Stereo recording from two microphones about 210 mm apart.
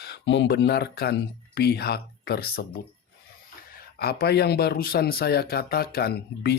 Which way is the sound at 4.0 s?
45° left (ahead or behind).